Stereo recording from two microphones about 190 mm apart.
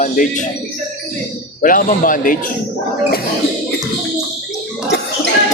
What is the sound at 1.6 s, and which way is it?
Speech, 45° left (ahead or behind).